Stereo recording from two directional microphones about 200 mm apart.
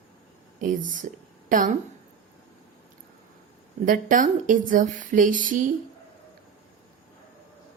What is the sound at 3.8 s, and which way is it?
Speech, 40° right (ahead or behind).